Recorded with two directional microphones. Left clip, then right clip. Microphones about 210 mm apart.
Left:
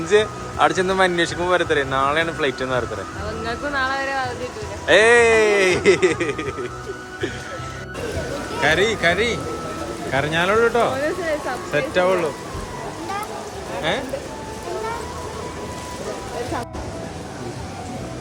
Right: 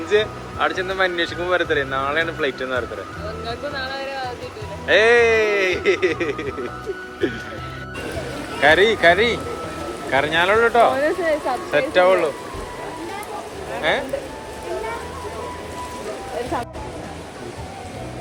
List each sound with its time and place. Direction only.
0.1 s a man's voice: 20° left (ahead or behind)
4.9 s a man's voice: 15° left (ahead or behind)
8.6 s a man's voice: centre (ahead or behind)
10.9 s a sound: 20° right (ahead or behind)
11.7 s speech: 5° left (ahead or behind)